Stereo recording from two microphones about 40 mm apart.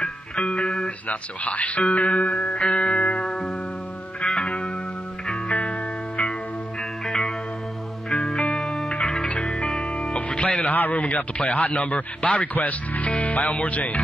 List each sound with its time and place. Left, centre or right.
0.6 s music: left
1.0 s speech: left
2.3 s music: left
8.1 s music: centre
9.8 s music: left
10.7 s speech: left